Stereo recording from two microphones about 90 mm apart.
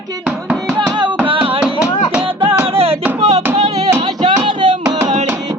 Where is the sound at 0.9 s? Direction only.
55° right (ahead or behind).